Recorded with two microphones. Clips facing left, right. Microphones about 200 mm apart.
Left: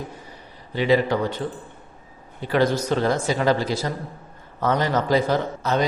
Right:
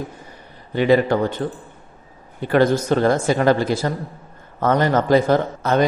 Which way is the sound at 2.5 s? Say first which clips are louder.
Right 4 dB; 50° right (ahead or behind).